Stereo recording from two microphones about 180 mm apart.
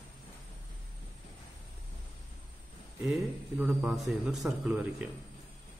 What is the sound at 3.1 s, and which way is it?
A man's voice, 5° right (ahead or behind).